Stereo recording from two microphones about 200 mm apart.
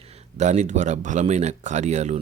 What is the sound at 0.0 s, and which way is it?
Speech, 35° right (ahead or behind).